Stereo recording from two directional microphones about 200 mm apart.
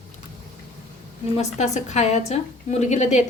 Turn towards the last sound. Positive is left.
turn(degrees=35)  # may be behind; listen again after turning